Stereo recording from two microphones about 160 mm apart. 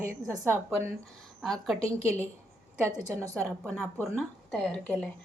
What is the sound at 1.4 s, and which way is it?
Speech, centre (ahead or behind).